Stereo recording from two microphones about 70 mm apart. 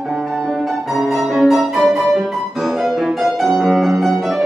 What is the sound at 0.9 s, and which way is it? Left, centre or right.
Music, centre.